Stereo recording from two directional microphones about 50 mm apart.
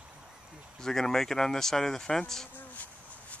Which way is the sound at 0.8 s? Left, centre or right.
Centre.